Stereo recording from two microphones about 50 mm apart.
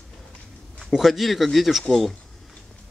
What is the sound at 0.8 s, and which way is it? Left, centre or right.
Speech, centre.